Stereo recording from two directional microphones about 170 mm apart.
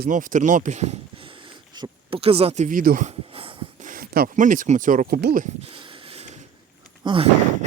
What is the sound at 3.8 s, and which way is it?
Speech, 55° right (ahead or behind).